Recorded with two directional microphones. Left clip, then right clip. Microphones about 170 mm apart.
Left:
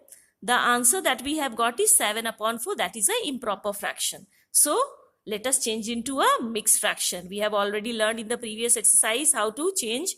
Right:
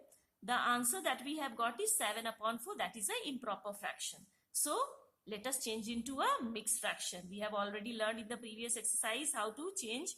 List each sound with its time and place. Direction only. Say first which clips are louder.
0.4 s a woman's voice: left 13 dB; 45° left (ahead or behind)